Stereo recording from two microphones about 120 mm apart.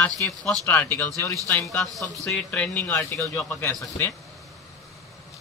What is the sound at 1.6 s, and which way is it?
A man's voice, centre (ahead or behind).